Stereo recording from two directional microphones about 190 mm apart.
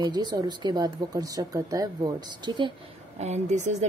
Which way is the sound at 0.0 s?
20° right (ahead or behind).